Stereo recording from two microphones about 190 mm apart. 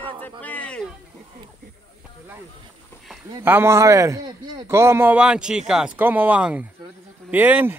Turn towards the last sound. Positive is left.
turn(degrees=-10)  # may be behind; listen again after turning